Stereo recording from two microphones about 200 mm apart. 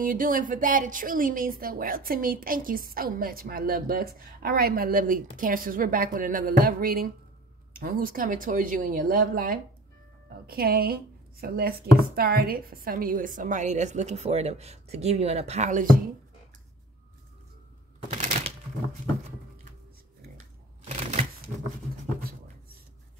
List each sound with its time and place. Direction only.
0.0 s a woman's voice: 45° right (ahead or behind)
18.1 s typewriter: 35° right (ahead or behind)
20.9 s shuffling cards: 35° right (ahead or behind)